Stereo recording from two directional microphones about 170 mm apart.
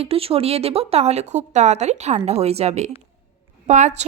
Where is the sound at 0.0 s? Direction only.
35° right (ahead or behind).